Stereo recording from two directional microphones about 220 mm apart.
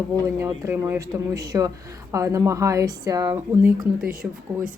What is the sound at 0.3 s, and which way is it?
Speech, 10° right (ahead or behind).